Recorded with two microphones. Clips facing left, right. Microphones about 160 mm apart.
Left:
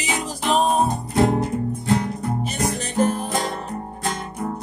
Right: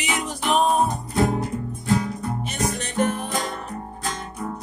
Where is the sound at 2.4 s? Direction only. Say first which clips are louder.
Left 2 dB; 35° left (ahead or behind).